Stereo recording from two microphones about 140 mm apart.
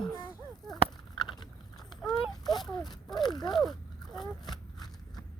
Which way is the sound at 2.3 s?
30° left (ahead or behind).